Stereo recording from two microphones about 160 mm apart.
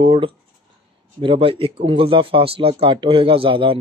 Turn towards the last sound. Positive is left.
turn(degrees=-35)  # may be behind; listen again after turning